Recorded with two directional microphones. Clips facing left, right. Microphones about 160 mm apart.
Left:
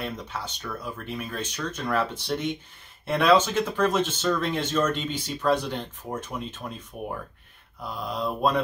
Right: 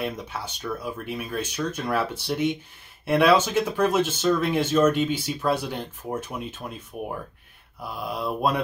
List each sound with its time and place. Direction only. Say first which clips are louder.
0.0 s speech: right 3 dB; 10° right (ahead or behind)